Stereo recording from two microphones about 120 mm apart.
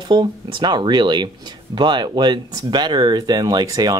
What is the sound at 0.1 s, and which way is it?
Speech, 40° right (ahead or behind).